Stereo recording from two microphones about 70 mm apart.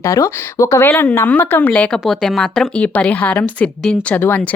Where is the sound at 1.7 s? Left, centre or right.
Centre.